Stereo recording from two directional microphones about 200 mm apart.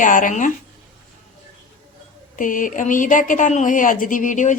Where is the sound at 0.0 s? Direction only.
40° left (ahead or behind).